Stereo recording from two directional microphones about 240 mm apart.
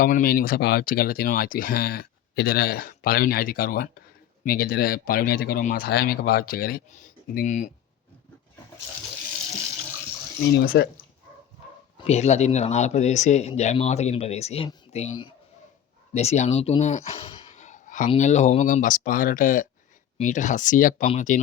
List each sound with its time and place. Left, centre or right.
0.0 s speech: left
10.6 s speech: left
11.9 s speech: left
16.1 s speech: left